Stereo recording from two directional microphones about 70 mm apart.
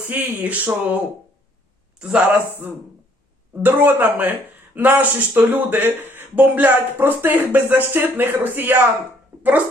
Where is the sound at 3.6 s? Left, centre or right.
Right.